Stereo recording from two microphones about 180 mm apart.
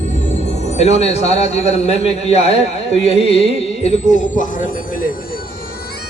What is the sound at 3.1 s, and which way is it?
Music, 35° left (ahead or behind).